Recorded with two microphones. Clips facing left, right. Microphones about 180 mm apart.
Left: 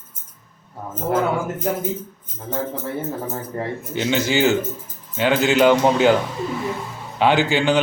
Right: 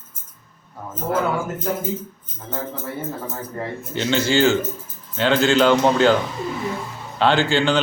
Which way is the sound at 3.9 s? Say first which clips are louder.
Right 1 dB; 10° left (ahead or behind).